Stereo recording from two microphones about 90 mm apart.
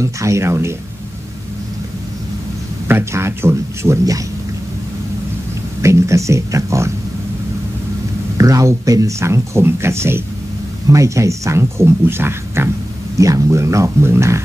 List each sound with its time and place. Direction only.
0.0 s speech: 35° right (ahead or behind)
2.9 s speech: 30° right (ahead or behind)
5.8 s speech: 35° right (ahead or behind)
8.4 s speech: 40° right (ahead or behind)